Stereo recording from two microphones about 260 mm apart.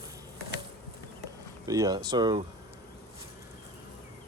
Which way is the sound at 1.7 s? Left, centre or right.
Centre.